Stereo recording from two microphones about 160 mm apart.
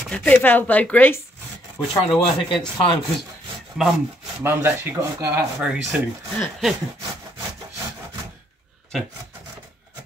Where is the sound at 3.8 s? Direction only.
Centre (ahead or behind).